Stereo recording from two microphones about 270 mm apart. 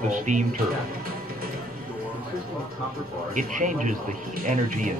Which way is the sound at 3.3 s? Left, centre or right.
Right.